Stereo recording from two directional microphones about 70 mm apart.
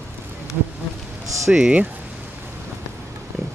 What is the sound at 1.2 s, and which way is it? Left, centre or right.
Speech, right.